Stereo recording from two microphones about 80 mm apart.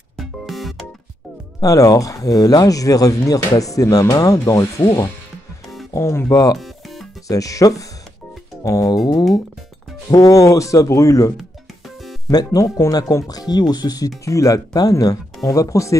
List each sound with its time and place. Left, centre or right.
0.2 s music: centre
1.6 s speech: left
6.6 s music: centre
7.2 s speech: left
12.4 s speech: left
13.3 s speech: left